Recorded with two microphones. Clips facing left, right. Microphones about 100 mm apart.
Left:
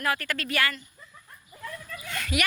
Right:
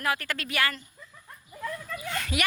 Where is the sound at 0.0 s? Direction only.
20° right (ahead or behind).